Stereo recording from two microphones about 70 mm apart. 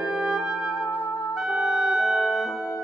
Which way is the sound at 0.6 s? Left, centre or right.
Left.